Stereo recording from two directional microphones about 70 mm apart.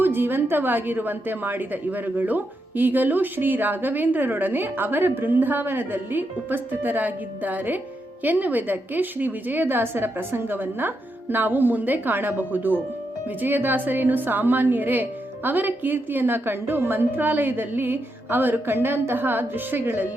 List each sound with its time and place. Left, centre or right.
0.0 s a woman's voice: right